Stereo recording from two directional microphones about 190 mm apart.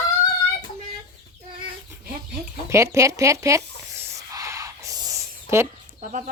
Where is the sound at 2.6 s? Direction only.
15° right (ahead or behind).